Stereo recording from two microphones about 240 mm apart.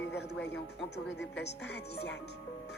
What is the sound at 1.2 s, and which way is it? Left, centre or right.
Speech, left.